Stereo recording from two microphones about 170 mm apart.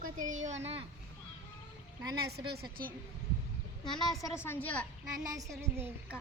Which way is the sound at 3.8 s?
25° left (ahead or behind).